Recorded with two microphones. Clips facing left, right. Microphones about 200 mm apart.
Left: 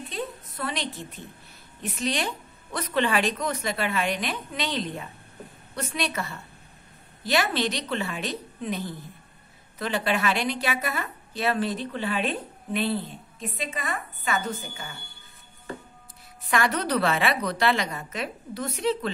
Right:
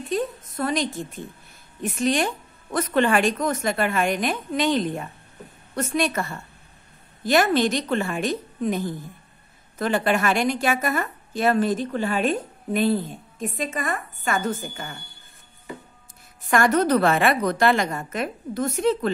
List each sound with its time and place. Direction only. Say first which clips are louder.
0.1 s a woman's voice: right 10 dB; 45° right (ahead or behind)
16.4 s a woman's voice: right 6 dB; 45° right (ahead or behind)